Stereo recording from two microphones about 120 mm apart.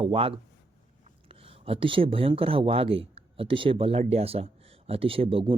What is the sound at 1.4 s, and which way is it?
Speech, 50° right (ahead or behind).